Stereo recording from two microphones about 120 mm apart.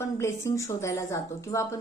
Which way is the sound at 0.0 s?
20° left (ahead or behind).